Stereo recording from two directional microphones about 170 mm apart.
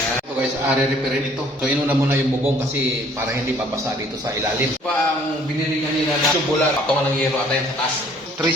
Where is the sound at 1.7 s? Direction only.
10° right (ahead or behind).